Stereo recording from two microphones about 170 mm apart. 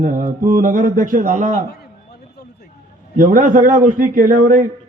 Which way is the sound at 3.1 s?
50° right (ahead or behind).